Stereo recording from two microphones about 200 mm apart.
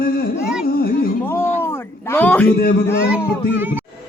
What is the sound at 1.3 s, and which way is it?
A man's voice, 10° left (ahead or behind).